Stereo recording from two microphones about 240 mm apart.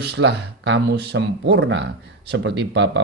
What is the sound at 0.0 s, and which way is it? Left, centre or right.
Speech, right.